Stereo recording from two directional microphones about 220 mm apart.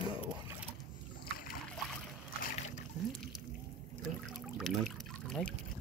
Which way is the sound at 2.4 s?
40° left (ahead or behind).